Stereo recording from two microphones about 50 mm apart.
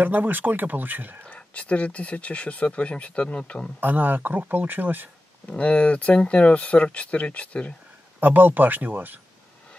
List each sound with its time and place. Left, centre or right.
0.0 s speech: right
1.2 s speech: left
3.8 s speech: right
5.5 s speech: left
8.2 s speech: right